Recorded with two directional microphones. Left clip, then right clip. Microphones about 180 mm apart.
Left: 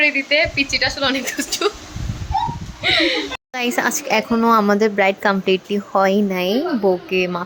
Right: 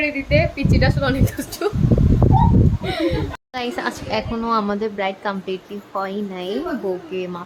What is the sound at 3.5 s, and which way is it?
A woman's voice, 25° left (ahead or behind).